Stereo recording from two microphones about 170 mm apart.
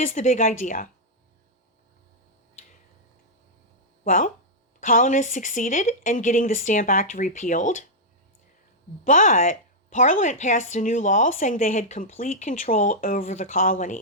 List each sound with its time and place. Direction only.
0.0 s speech: 50° left (ahead or behind)
4.0 s speech: 50° left (ahead or behind)
9.0 s speech: 50° left (ahead or behind)